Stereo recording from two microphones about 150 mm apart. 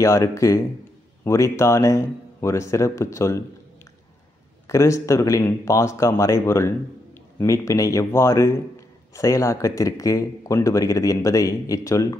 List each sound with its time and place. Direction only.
0.0 s speech: 20° left (ahead or behind)
4.6 s speech: 20° left (ahead or behind)